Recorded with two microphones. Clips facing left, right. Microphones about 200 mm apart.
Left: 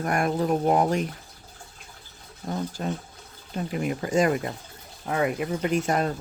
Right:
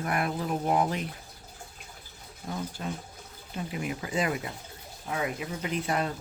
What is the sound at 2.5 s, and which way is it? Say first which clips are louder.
Speech: left 5 dB; 45° left (ahead or behind).